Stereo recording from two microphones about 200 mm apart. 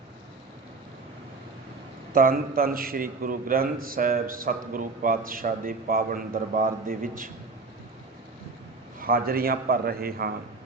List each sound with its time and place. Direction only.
2.1 s a man's voice: 45° right (ahead or behind)
9.0 s a man's voice: 50° right (ahead or behind)